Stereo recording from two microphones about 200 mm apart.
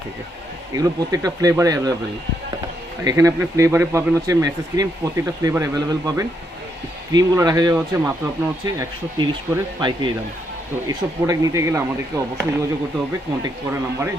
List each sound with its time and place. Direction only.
0.8 s speech: 20° right (ahead or behind)
3.0 s speech: 15° right (ahead or behind)